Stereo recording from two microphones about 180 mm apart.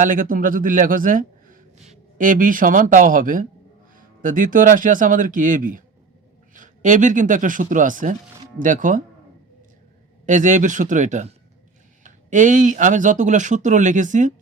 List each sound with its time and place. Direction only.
0.0 s speech: 50° right (ahead or behind)
10.2 s speech: 45° right (ahead or behind)